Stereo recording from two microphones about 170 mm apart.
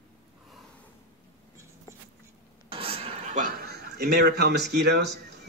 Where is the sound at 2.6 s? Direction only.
35° right (ahead or behind); by 3.7 s 50° right (ahead or behind).